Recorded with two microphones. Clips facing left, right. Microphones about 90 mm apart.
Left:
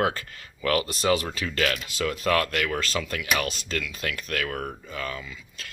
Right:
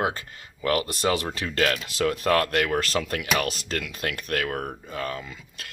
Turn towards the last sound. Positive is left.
turn(degrees=-40)  # may be behind; listen again after turning